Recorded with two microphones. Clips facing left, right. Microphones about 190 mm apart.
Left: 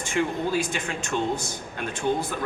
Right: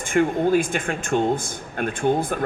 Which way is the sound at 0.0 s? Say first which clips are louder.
Right 6 dB; 50° right (ahead or behind).